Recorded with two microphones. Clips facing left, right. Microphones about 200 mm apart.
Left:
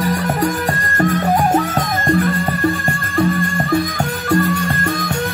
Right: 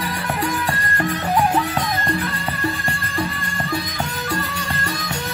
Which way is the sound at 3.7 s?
50° left (ahead or behind).